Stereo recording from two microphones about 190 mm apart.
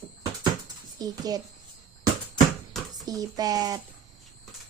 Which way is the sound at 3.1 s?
20° right (ahead or behind).